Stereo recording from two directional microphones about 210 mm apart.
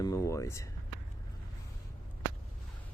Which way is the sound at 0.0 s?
15° left (ahead or behind).